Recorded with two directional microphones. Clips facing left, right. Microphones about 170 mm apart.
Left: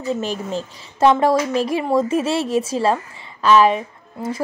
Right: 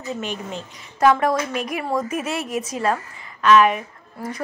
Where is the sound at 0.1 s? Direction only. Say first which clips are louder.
Left 5 dB; 35° left (ahead or behind).